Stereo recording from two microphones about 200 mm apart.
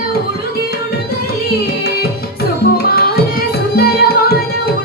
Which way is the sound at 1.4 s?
50° left (ahead or behind).